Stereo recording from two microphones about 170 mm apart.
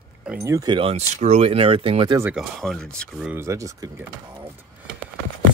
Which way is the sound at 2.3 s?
Centre (ahead or behind).